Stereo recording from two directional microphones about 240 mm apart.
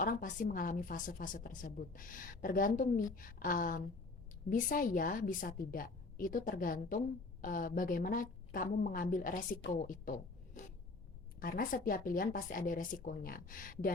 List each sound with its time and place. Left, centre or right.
0.0 s a woman's voice: left